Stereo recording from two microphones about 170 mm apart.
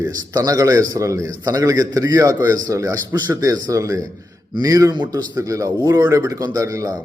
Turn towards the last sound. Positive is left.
turn(degrees=-20)  # may be behind; listen again after turning